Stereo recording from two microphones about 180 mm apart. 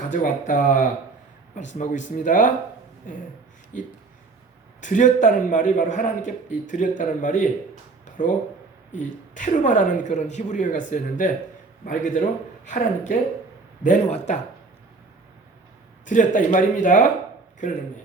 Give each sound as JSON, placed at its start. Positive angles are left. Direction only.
{"t": 0.1, "sound": "a man's voice", "side_deg": 45}
{"t": 4.8, "sound": "a man's voice", "side_deg": 45}
{"t": 8.0, "sound": "a sound", "side_deg": 45}
{"t": 9.0, "sound": "a man's voice", "side_deg": 45}
{"t": 16.0, "sound": "a man's voice", "side_deg": 45}